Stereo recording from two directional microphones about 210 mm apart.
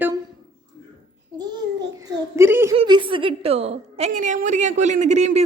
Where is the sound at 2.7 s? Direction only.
20° right (ahead or behind).